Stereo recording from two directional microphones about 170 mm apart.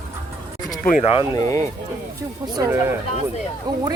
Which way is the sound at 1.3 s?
20° left (ahead or behind).